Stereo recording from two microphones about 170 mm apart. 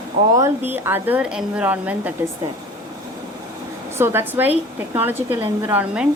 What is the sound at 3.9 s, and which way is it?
A woman's voice, 15° right (ahead or behind).